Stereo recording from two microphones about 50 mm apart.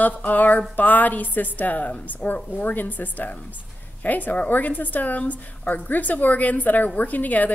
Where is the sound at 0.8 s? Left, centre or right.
Left.